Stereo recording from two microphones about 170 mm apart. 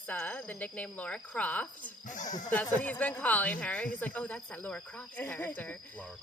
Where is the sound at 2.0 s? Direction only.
50° left (ahead or behind).